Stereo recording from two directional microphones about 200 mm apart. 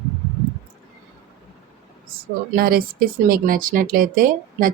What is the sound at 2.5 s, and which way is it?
Speech, 50° right (ahead or behind).